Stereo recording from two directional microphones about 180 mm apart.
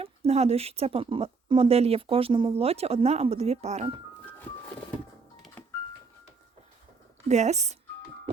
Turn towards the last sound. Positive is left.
turn(degrees=-40)  # may be behind; listen again after turning